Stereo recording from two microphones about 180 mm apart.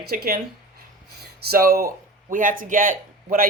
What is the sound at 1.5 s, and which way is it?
Speech, 55° right (ahead or behind).